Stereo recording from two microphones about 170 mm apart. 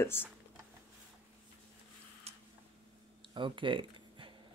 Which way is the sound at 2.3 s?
35° right (ahead or behind).